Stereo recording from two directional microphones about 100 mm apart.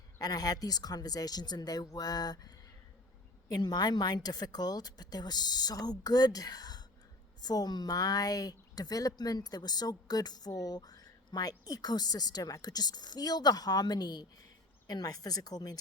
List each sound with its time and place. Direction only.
0.2 s a woman's voice: 40° left (ahead or behind)
3.5 s a woman's voice: 40° left (ahead or behind)